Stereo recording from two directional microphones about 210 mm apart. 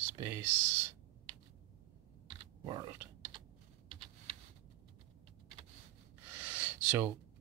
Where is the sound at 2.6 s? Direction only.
20° right (ahead or behind).